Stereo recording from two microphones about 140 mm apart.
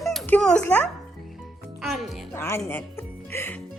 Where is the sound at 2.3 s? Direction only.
15° left (ahead or behind).